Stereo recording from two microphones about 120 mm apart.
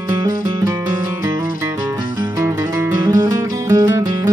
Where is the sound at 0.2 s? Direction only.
25° right (ahead or behind).